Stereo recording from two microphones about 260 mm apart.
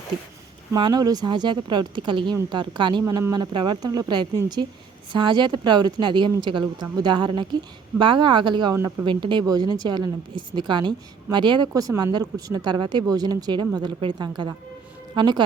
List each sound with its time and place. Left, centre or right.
0.7 s speech: centre